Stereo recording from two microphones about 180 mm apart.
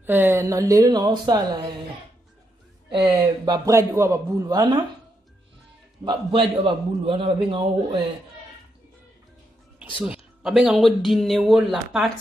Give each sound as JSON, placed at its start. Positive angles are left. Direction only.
{"t": 0.0, "sound": "a man's voice", "side_deg": -10}
{"t": 2.9, "sound": "a man's voice", "side_deg": -30}
{"t": 6.0, "sound": "a man's voice", "side_deg": -25}
{"t": 10.0, "sound": "speech", "side_deg": -5}